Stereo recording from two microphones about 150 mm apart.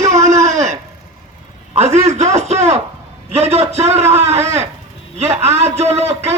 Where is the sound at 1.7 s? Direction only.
45° right (ahead or behind).